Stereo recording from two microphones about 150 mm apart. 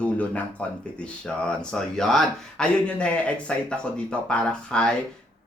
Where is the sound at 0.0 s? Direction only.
10° left (ahead or behind).